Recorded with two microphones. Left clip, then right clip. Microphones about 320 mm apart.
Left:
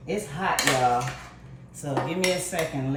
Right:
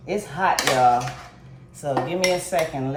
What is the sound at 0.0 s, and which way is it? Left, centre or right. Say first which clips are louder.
Speech: right 4 dB; centre.